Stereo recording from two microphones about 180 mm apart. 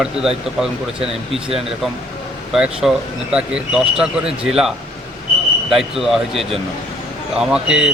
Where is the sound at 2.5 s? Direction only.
5° right (ahead or behind).